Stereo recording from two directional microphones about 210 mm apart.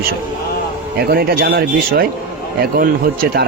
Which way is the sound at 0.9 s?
50° right (ahead or behind).